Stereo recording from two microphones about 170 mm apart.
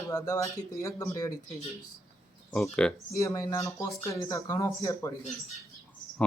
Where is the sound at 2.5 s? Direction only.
5° left (ahead or behind).